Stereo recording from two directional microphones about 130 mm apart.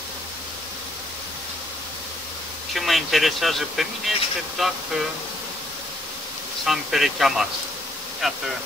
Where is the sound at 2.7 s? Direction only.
Centre (ahead or behind).